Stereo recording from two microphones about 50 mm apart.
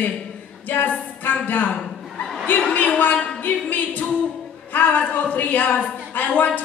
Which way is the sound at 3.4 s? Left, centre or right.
Left.